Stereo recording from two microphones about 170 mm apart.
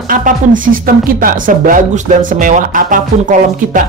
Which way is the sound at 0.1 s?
55° right (ahead or behind).